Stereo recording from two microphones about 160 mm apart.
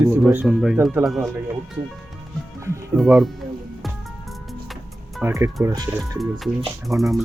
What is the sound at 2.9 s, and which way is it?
Speech, centre (ahead or behind).